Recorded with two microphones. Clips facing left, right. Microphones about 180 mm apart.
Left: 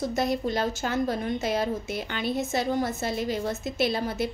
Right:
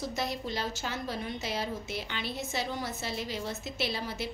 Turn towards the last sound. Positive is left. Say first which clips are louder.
# left 8 dB
turn(degrees=50)  # may be behind; listen again after turning